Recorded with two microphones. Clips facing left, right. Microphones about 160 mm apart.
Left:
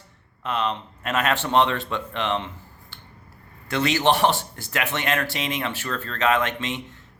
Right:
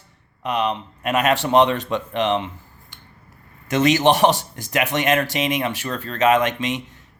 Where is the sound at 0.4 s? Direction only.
15° right (ahead or behind).